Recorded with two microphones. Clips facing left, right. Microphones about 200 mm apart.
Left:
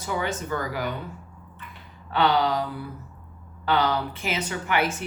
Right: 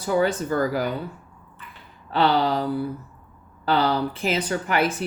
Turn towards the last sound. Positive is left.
turn(degrees=-35)  # may be behind; listen again after turning